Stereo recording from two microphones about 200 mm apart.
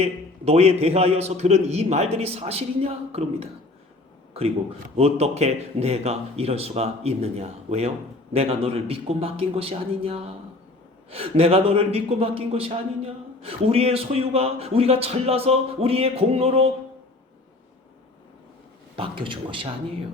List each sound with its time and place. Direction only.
0.0 s speech: 30° right (ahead or behind)
4.9 s a man's voice: 30° right (ahead or behind)
18.9 s a man's voice: 25° right (ahead or behind)